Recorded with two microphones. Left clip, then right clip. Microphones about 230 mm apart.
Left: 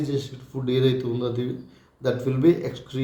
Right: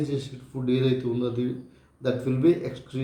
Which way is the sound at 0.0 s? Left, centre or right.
Centre.